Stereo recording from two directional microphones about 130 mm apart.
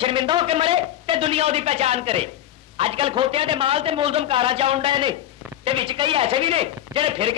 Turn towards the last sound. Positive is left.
turn(degrees=-45)  # may be behind; listen again after turning